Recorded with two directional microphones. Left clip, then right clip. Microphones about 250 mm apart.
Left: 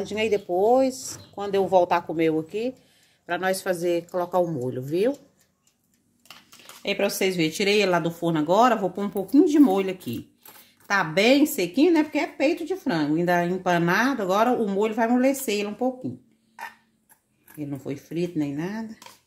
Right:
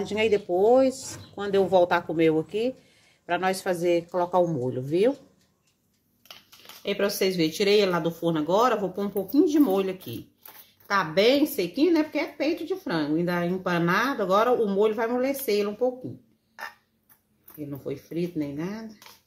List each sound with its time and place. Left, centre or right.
0.0 s speech: centre
6.8 s speech: left
17.6 s speech: left